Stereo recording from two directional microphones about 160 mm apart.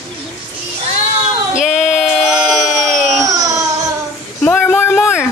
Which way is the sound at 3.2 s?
20° right (ahead or behind).